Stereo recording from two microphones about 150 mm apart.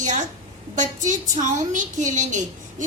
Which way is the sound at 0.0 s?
55° right (ahead or behind).